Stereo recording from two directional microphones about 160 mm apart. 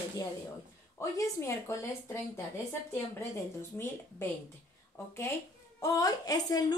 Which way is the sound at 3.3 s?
15° left (ahead or behind).